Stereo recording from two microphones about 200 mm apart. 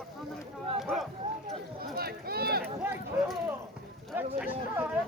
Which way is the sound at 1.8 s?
50° right (ahead or behind).